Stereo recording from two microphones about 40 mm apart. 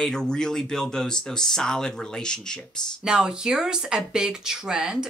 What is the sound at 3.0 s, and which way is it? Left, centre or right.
Speech, right.